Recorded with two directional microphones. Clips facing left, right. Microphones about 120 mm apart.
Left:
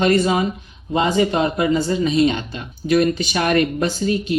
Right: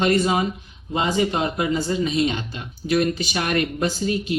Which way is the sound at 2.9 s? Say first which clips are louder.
Left 4 dB; 55° left (ahead or behind).